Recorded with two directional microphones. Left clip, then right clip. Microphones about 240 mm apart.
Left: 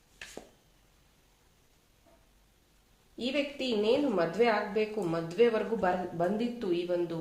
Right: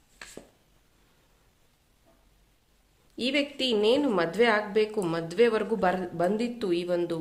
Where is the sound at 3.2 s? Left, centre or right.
Right.